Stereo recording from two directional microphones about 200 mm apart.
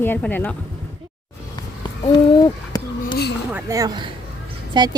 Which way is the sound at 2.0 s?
20° left (ahead or behind).